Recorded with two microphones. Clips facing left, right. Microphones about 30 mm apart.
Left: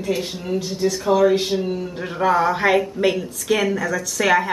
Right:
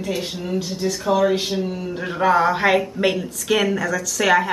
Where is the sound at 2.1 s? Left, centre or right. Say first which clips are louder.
Right 1 dB; centre.